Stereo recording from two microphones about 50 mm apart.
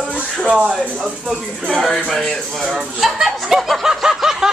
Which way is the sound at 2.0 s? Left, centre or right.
Centre.